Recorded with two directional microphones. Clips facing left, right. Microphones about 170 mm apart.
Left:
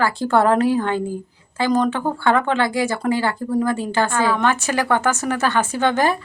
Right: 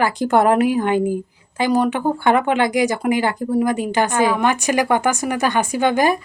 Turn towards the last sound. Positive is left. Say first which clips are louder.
# right 2 dB
turn(degrees=-15)  # may be behind; listen again after turning